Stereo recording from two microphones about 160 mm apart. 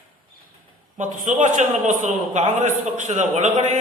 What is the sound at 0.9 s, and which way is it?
A man's voice, 55° right (ahead or behind).